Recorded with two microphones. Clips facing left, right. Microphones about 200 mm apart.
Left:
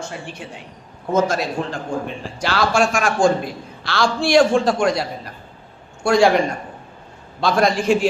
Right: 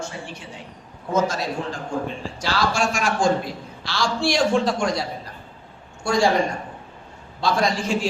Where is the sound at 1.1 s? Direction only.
55° left (ahead or behind).